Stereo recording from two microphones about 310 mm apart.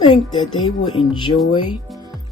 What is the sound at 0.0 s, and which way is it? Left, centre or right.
Speech, centre.